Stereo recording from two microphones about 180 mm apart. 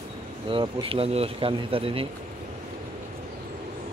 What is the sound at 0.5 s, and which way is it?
Speech, 30° right (ahead or behind).